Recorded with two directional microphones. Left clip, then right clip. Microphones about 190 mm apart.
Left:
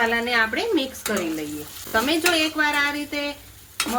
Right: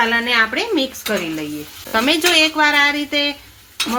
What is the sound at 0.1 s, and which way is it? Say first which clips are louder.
Speech: right 5 dB; 45° right (ahead or behind).